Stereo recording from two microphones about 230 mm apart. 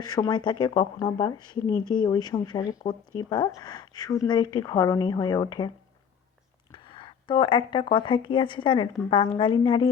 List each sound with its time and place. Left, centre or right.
0.0 s a woman's voice: centre